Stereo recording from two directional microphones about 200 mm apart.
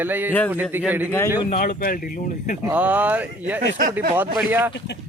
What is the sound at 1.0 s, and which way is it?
Speech, 15° left (ahead or behind).